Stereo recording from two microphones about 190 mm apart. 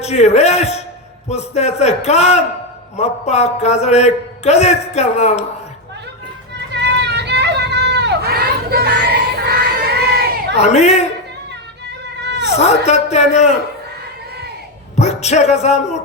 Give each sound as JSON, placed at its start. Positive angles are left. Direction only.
{"t": 0.0, "sound": "a man's voice", "side_deg": 35}
{"t": 6.5, "sound": "a sound", "side_deg": -60}
{"t": 10.6, "sound": "a man's voice", "side_deg": 35}
{"t": 12.5, "sound": "a man's voice", "side_deg": 35}
{"t": 14.9, "sound": "speech", "side_deg": 35}